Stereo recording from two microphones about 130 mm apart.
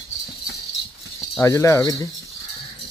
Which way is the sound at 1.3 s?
25° left (ahead or behind).